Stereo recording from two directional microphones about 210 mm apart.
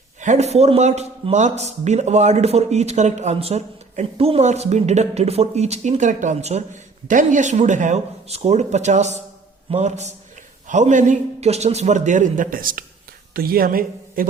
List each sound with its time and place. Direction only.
0.2 s a woman's voice: 35° right (ahead or behind)